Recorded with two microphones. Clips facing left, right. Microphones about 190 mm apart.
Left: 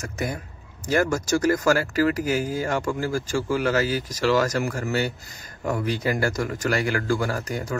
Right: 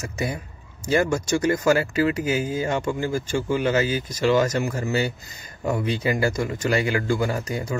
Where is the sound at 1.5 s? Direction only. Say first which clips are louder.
Right 2 dB; 20° right (ahead or behind).